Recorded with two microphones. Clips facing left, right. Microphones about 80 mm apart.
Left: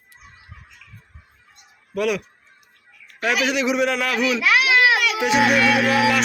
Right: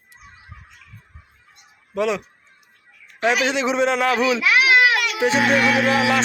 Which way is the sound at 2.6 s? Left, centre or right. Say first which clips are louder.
Even; right.